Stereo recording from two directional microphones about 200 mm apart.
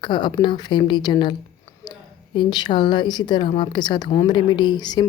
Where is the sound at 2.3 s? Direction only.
20° left (ahead or behind).